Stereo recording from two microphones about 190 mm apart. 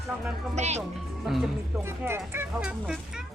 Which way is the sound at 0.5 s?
35° right (ahead or behind).